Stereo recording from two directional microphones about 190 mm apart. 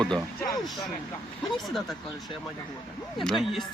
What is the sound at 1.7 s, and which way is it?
Speech, centre (ahead or behind).